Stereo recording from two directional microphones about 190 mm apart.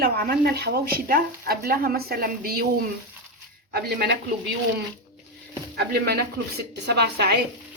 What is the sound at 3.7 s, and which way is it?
Speech, 55° right (ahead or behind).